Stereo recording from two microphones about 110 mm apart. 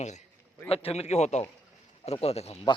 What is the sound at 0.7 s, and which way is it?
Speech, 60° left (ahead or behind).